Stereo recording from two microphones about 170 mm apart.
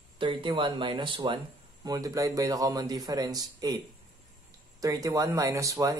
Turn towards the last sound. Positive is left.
turn(degrees=-20)  # may be behind; listen again after turning